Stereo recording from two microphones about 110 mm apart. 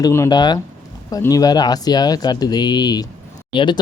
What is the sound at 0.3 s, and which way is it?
Speech, 40° left (ahead or behind).